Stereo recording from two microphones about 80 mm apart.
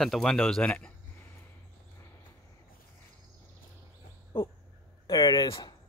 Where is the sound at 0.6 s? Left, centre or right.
Centre.